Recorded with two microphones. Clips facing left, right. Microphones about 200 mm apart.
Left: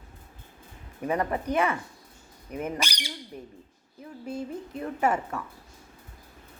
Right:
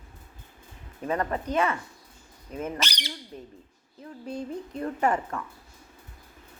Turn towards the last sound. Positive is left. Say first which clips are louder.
# even
turn(degrees=5)  # may be behind; listen again after turning